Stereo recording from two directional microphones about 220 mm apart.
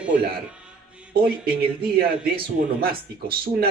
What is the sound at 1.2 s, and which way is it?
Speech, 45° right (ahead or behind).